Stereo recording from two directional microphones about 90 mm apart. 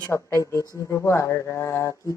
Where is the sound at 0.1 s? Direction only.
35° left (ahead or behind).